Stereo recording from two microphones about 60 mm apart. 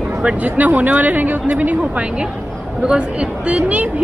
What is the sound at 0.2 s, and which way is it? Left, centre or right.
Speech, right.